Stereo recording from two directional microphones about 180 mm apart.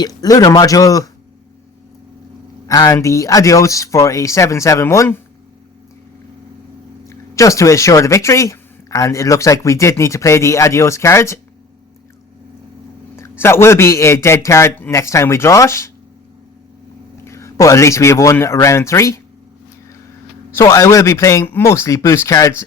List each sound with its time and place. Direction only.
0.0 s speech: 20° left (ahead or behind)
2.6 s a man's voice: 20° left (ahead or behind)
7.1 s a man's voice: 15° left (ahead or behind)
13.1 s a man's voice: 15° left (ahead or behind)
17.2 s a man's voice: 15° left (ahead or behind)
20.5 s a man's voice: 15° left (ahead or behind)